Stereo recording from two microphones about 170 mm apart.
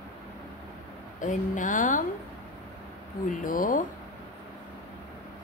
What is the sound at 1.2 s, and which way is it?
Speech, 50° left (ahead or behind).